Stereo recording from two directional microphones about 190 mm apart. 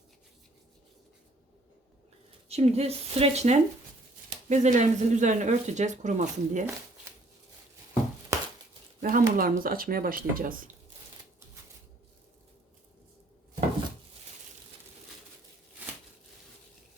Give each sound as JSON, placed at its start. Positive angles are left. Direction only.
{"t": 2.5, "sound": "speech", "side_deg": -35}
{"t": 8.3, "sound": "a sound", "side_deg": -15}
{"t": 9.0, "sound": "speech", "side_deg": -45}